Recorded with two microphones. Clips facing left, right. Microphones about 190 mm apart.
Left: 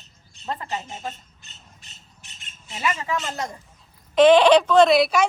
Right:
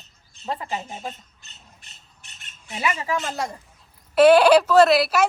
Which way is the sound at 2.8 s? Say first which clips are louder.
Right 1 dB; 10° right (ahead or behind).